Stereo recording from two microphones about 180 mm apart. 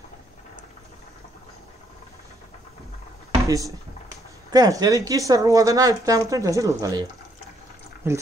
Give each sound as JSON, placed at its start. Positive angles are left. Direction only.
{"t": 3.4, "sound": "a woman's voice", "side_deg": -20}